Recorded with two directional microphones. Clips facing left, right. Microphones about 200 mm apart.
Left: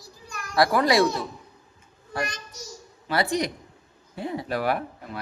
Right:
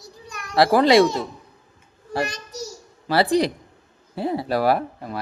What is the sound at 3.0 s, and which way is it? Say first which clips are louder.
Speech: right 6 dB; 35° right (ahead or behind).